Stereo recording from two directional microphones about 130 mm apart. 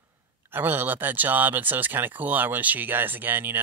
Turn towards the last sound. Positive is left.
turn(degrees=-15)  # may be behind; listen again after turning